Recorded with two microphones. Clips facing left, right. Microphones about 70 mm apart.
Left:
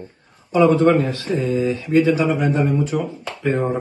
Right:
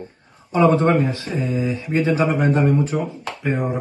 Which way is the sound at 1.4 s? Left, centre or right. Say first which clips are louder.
Left 3 dB; centre.